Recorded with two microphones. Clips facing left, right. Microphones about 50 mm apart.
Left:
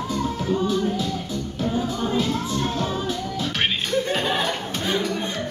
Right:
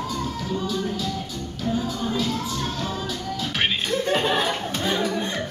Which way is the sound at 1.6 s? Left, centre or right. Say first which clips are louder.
Even; left.